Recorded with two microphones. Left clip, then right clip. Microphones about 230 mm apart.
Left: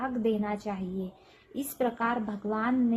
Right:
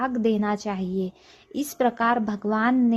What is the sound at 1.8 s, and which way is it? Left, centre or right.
Speech, right.